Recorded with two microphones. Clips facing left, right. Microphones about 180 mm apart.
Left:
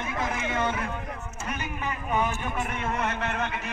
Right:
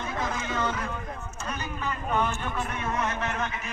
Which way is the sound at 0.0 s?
20° left (ahead or behind).